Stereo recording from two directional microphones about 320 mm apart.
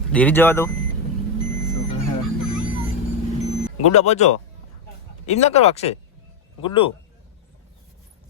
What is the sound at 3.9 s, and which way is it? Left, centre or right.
Speech, left.